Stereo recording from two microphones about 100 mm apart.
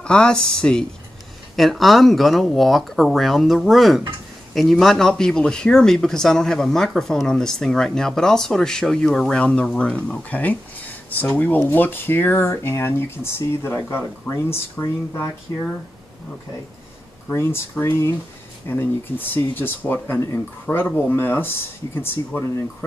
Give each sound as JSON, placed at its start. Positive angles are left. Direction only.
{"t": 0.0, "sound": "speech", "side_deg": 10}
{"t": 17.3, "sound": "speech", "side_deg": 25}